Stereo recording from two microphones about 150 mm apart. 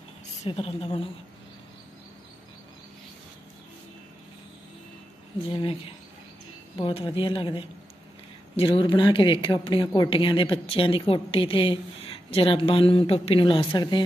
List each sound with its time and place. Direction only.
0.5 s speech: 40° left (ahead or behind)
5.5 s speech: 35° left (ahead or behind)